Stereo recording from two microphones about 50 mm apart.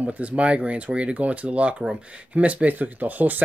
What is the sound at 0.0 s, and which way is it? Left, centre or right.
Speech, right.